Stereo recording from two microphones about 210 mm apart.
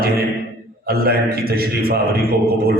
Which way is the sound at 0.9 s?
45° right (ahead or behind).